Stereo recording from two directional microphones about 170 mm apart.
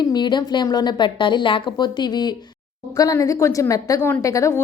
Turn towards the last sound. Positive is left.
turn(degrees=20)  # may be behind; listen again after turning